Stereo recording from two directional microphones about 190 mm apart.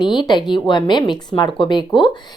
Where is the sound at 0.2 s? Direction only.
25° left (ahead or behind).